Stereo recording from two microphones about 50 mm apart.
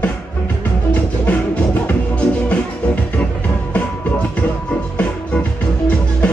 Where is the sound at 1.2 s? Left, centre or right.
Left.